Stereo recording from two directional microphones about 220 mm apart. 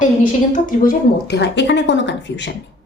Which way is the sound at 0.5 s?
40° left (ahead or behind).